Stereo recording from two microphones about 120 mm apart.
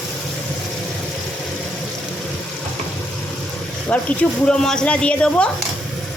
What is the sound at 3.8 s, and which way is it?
Speech, 10° left (ahead or behind).